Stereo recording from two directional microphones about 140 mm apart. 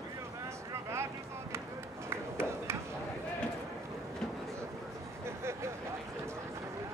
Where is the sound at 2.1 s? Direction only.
20° right (ahead or behind).